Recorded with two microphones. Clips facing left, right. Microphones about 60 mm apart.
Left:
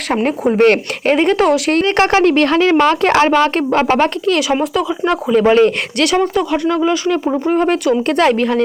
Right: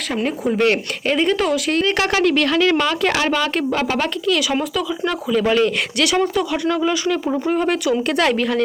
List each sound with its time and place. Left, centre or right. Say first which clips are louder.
0.1 s speech: left 6 dB; left
1.8 s speech: left 5 dB; left
6.1 s speech: left 4 dB; centre